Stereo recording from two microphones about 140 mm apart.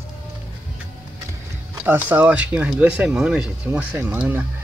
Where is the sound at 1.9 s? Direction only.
10° right (ahead or behind).